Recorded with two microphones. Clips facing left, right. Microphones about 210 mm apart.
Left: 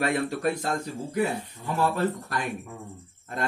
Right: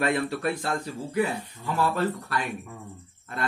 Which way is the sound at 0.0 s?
40° left (ahead or behind).